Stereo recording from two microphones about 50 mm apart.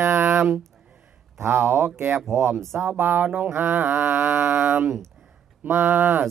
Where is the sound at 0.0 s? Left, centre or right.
Right.